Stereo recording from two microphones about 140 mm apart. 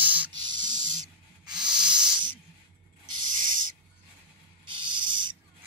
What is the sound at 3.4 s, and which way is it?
Owl, 75° right (ahead or behind).